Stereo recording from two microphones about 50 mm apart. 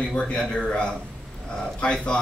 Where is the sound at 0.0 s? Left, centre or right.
Centre.